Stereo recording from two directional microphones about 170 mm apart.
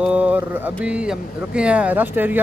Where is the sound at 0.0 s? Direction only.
10° right (ahead or behind).